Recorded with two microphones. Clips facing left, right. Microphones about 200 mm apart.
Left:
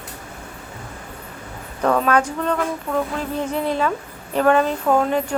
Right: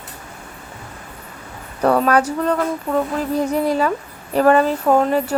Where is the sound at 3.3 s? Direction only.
40° right (ahead or behind).